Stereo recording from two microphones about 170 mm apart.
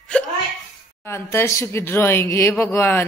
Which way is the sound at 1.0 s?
15° left (ahead or behind).